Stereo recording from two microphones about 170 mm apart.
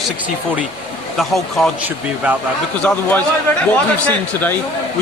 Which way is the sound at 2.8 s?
5° left (ahead or behind).